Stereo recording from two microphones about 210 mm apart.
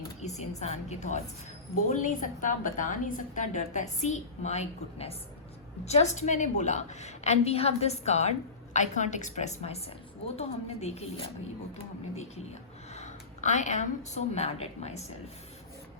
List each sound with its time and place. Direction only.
0.2 s a woman's voice: 35° left (ahead or behind)
12.9 s a woman's voice: 35° left (ahead or behind)